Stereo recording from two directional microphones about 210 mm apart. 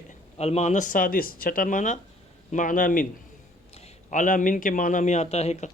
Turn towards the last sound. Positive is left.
turn(degrees=30)  # may be behind; listen again after turning